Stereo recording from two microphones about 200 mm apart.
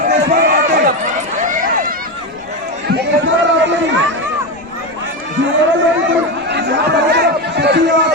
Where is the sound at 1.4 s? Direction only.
40° right (ahead or behind).